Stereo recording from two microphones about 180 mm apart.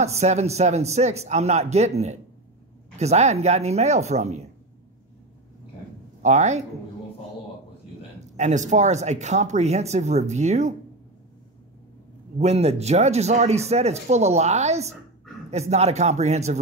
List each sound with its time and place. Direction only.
0.0 s speech: 40° right (ahead or behind)
6.2 s speech: 40° right (ahead or behind)
8.2 s speech: 40° right (ahead or behind)
12.4 s speech: 35° right (ahead or behind)